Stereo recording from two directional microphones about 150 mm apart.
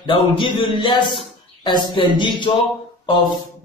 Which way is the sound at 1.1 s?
30° left (ahead or behind).